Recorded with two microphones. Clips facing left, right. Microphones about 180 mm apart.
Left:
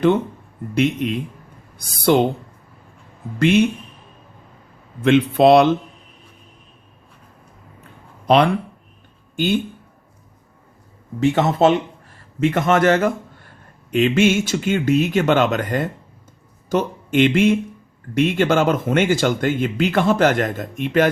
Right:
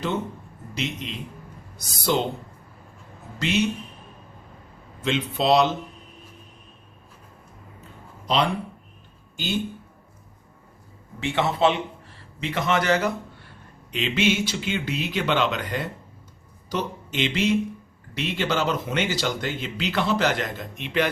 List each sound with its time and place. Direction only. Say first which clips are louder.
0.7 s speech: left 12 dB; 55° left (ahead or behind)
3.3 s speech: left 9 dB; 55° left (ahead or behind)
5.0 s speech: left 10 dB; 60° left (ahead or behind)
9.3 s speech: left 10 dB; 55° left (ahead or behind)
11.2 s a man's voice: left 6 dB; 40° left (ahead or behind)